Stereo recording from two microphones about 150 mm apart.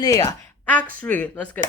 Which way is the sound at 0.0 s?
25° left (ahead or behind).